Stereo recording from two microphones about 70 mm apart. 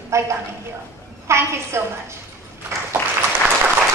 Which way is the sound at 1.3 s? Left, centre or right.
Right.